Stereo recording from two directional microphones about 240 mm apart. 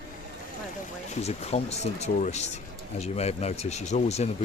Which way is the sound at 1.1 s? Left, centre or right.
Left.